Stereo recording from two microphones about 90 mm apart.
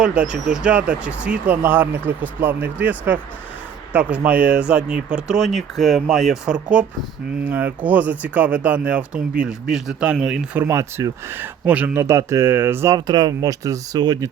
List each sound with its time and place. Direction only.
0.0 s speech: 15° right (ahead or behind)
10.6 s speech: 30° right (ahead or behind)
11.9 s speech: 30° right (ahead or behind)
12.9 s speech: 45° right (ahead or behind)